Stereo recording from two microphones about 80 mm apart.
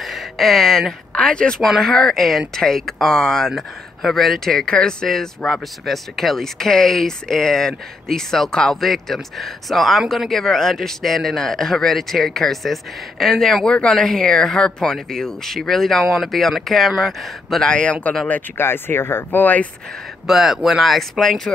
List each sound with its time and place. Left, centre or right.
0.0 s a sound: centre
1.1 s speech: centre
18.3 s speech: left
20.2 s speech: centre